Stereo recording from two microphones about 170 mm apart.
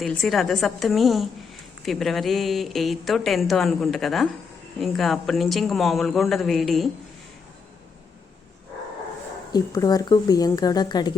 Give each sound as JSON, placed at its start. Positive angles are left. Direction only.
{"t": 0.0, "sound": "speech", "side_deg": 0}
{"t": 9.5, "sound": "speech", "side_deg": 20}